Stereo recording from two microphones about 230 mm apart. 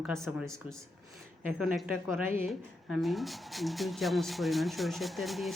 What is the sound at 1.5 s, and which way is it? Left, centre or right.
Speech, centre.